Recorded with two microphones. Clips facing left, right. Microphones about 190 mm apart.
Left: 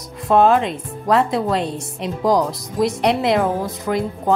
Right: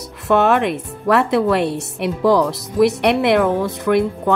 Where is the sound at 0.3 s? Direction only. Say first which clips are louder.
Even; 70° right (ahead or behind).